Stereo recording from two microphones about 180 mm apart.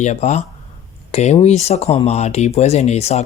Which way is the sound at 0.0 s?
40° left (ahead or behind).